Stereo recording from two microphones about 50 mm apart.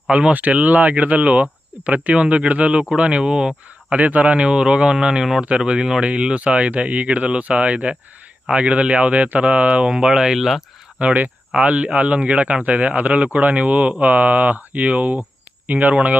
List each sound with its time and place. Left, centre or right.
0.1 s speech: right
3.9 s speech: right; by 10.6 s centre
11.0 s speech: right